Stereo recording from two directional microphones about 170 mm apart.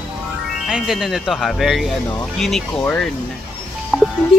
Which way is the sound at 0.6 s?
Centre (ahead or behind).